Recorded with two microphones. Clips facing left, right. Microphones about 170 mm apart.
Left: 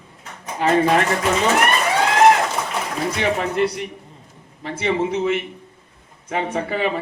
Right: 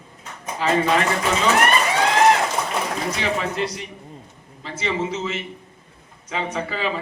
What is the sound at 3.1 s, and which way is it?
A man's voice, 60° left (ahead or behind).